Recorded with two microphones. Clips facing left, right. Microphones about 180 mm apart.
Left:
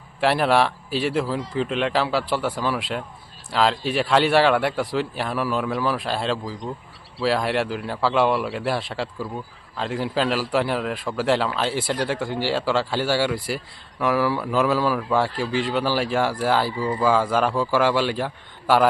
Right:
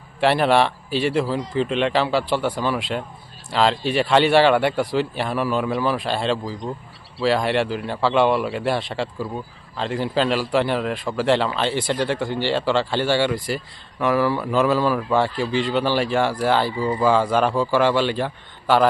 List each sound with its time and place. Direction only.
0.2 s speech: centre (ahead or behind)